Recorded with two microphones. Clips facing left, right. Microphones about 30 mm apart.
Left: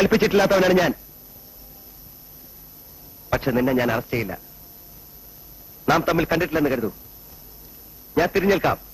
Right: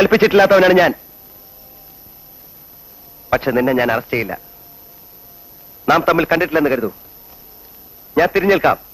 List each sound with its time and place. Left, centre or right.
0.0 s a man's voice: right
3.3 s a man's voice: right
5.9 s a man's voice: right
8.1 s a man's voice: right